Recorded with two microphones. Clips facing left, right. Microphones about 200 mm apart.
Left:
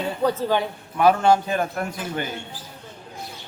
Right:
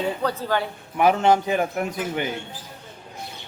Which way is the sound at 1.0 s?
15° right (ahead or behind).